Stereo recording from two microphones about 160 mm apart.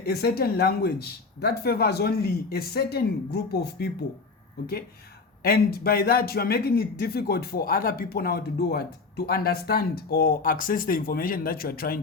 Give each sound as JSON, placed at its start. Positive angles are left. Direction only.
{"t": 0.0, "sound": "a man's voice", "side_deg": 75}
{"t": 5.4, "sound": "a man's voice", "side_deg": 70}